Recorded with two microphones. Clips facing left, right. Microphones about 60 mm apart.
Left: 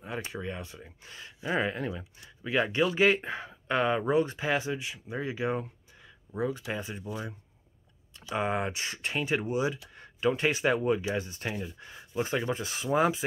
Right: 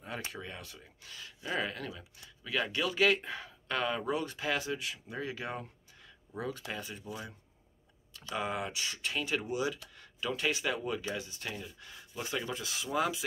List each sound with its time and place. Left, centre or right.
0.0 s speech: centre
8.1 s typing: centre
8.4 s speech: left